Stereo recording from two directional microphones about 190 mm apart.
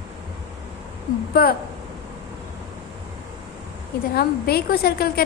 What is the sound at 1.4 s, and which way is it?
Speech, 50° left (ahead or behind).